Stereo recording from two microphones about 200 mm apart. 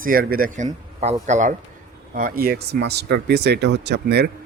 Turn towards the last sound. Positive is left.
turn(degrees=-55)  # may be behind; listen again after turning